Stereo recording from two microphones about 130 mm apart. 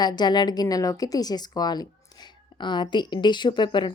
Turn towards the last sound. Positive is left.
turn(degrees=35)  # may be behind; listen again after turning